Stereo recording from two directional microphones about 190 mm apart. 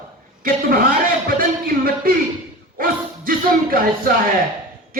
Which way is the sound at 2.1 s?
50° right (ahead or behind).